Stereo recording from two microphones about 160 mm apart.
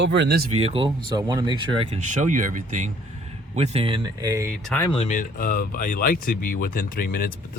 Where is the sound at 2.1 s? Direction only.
55° right (ahead or behind).